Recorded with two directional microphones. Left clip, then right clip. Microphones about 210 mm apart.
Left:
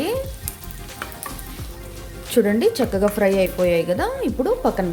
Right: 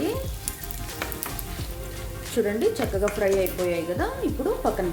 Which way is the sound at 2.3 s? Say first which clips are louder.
Left 6 dB; 45° left (ahead or behind).